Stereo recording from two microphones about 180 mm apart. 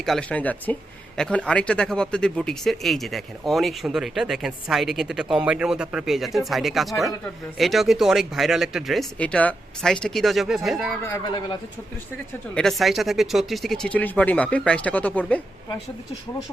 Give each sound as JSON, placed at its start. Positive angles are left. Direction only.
{"t": 0.0, "sound": "speech", "side_deg": 5}
{"t": 11.0, "sound": "speech", "side_deg": 20}
{"t": 12.5, "sound": "speech", "side_deg": 0}